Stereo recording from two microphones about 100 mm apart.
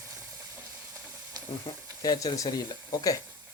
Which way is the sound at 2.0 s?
40° left (ahead or behind).